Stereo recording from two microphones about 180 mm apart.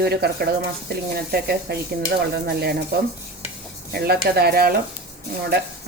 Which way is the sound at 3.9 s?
60° right (ahead or behind).